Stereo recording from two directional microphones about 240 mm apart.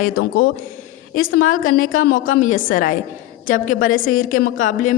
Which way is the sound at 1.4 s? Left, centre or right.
Left.